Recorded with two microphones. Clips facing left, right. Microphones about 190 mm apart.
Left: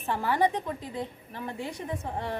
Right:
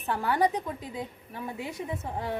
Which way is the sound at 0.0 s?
Centre (ahead or behind).